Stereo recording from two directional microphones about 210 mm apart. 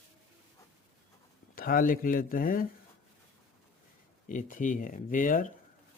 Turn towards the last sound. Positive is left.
turn(degrees=40)  # may be behind; listen again after turning